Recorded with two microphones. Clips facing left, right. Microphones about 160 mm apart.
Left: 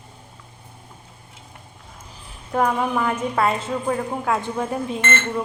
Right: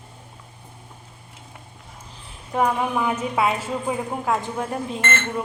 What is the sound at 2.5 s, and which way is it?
A woman's voice, 5° right (ahead or behind).